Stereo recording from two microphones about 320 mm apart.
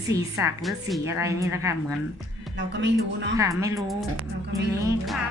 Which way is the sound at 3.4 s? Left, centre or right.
Centre.